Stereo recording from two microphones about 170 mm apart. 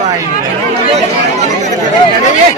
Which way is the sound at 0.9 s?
45° right (ahead or behind).